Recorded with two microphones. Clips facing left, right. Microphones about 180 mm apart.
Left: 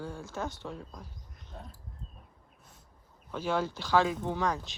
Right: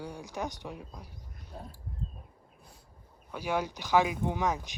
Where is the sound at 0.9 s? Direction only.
10° right (ahead or behind).